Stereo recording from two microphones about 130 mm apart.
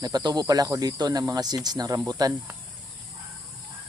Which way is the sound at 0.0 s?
30° right (ahead or behind).